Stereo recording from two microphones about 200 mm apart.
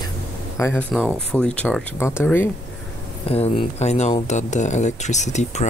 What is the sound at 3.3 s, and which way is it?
Speech, 30° left (ahead or behind).